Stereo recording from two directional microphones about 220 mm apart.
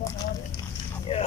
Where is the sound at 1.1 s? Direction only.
25° left (ahead or behind).